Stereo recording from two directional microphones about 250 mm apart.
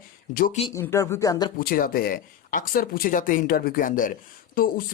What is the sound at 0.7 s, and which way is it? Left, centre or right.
Speech, centre.